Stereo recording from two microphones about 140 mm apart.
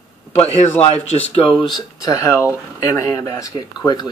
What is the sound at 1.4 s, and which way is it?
Speech, 35° left (ahead or behind).